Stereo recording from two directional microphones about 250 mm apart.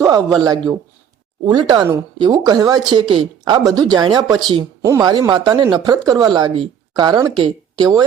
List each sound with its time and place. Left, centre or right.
0.0 s speech: centre